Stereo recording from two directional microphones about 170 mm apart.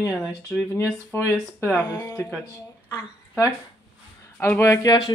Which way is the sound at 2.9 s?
15° left (ahead or behind).